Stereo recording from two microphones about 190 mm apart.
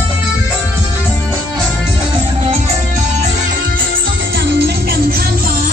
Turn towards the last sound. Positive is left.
turn(degrees=-55)  # may be behind; listen again after turning